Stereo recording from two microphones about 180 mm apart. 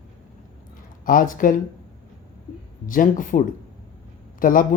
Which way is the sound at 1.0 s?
50° left (ahead or behind).